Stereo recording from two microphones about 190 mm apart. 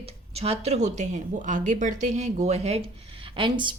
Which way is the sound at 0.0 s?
30° right (ahead or behind).